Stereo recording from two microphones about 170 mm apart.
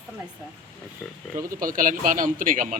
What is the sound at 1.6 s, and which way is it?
Speech, 55° right (ahead or behind).